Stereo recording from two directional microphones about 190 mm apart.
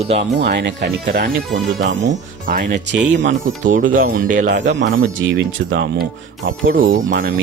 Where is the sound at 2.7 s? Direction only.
70° right (ahead or behind).